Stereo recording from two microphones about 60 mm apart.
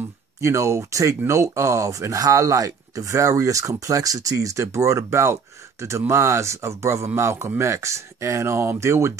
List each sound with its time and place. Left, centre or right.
0.4 s speech: right